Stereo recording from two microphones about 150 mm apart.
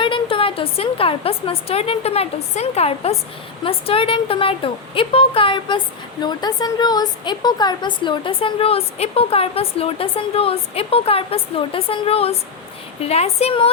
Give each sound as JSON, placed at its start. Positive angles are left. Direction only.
{"t": 0.0, "sound": "a woman's voice", "side_deg": 35}